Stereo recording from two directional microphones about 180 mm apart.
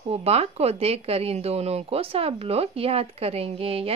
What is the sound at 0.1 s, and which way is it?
Speech, 35° right (ahead or behind).